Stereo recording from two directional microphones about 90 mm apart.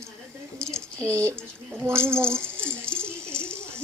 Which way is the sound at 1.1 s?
35° right (ahead or behind).